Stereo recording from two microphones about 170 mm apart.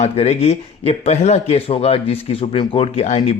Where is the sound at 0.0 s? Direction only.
40° left (ahead or behind).